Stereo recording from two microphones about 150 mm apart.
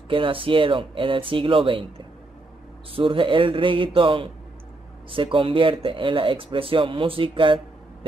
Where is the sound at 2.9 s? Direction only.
35° right (ahead or behind).